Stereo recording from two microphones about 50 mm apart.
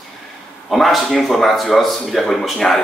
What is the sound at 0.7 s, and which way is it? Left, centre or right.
A man's voice, centre.